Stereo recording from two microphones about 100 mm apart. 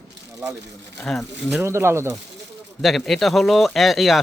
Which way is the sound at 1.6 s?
25° right (ahead or behind).